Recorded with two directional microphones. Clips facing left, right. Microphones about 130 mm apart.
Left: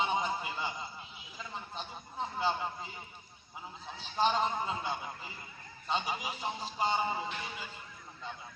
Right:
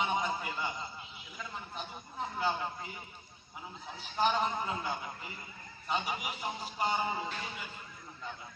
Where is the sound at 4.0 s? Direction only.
30° left (ahead or behind).